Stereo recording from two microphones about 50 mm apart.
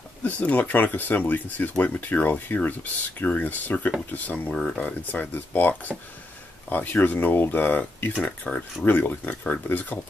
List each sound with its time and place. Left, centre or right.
0.2 s speech: left
4.5 s speech: centre
4.8 s speech: left
8.2 s speech: left
8.8 s speech: left